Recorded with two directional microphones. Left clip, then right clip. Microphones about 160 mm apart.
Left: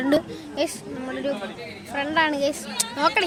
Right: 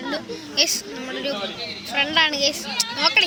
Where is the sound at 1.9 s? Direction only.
30° left (ahead or behind).